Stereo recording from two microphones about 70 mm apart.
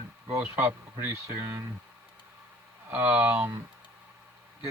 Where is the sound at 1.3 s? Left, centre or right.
Right.